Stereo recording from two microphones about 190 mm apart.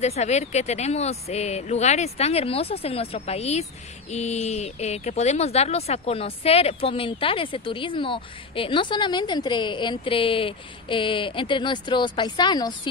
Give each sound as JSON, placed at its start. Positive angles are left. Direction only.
{"t": 0.0, "sound": "speech", "side_deg": 35}